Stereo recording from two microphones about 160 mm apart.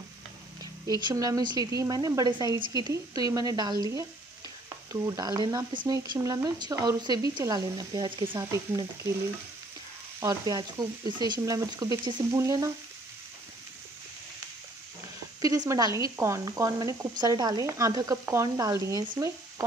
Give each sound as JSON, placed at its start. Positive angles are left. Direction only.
{"t": 1.0, "sound": "speech", "side_deg": -20}
{"t": 10.2, "sound": "speech", "side_deg": -25}
{"t": 15.4, "sound": "speech", "side_deg": -20}